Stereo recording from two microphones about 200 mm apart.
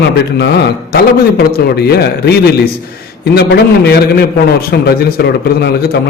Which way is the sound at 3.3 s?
50° left (ahead or behind).